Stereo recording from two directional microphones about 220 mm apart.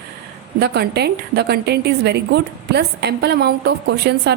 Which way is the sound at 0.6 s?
45° right (ahead or behind).